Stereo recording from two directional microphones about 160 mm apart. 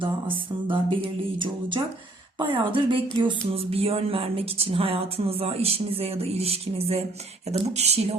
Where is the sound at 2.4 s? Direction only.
30° right (ahead or behind).